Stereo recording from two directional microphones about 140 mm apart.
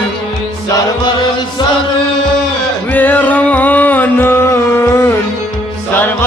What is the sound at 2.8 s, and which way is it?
Music, 15° left (ahead or behind).